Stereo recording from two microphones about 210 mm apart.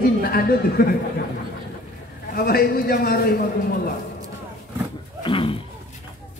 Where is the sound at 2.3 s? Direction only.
45° left (ahead or behind).